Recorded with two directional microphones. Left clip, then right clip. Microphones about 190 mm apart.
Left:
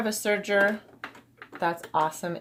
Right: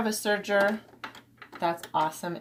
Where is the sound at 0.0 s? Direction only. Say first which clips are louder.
Left 1 dB; 30° left (ahead or behind).